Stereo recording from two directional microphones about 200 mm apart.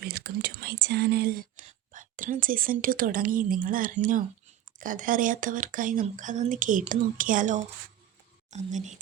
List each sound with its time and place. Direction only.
0.0 s speech: 55° right (ahead or behind); by 8.9 s 35° right (ahead or behind)